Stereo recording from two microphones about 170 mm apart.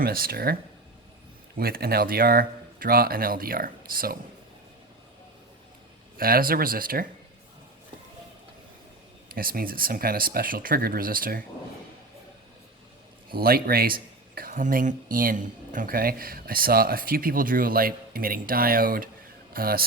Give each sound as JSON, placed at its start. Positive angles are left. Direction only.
{"t": 0.0, "sound": "speech", "side_deg": -60}
{"t": 1.5, "sound": "speech", "side_deg": -60}
{"t": 6.1, "sound": "speech", "side_deg": -60}
{"t": 9.3, "sound": "speech", "side_deg": -60}
{"t": 13.3, "sound": "speech", "side_deg": -60}